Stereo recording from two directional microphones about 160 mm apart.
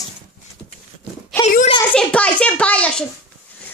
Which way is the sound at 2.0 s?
5° left (ahead or behind).